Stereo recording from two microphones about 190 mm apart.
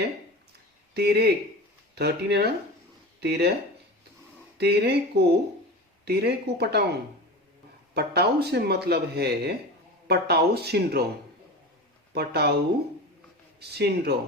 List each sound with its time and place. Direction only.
0.9 s speech: 60° right (ahead or behind)
4.5 s speech: 60° right (ahead or behind)
7.9 s speech: 60° right (ahead or behind)
12.1 s speech: 55° right (ahead or behind)
13.6 s speech: 60° right (ahead or behind)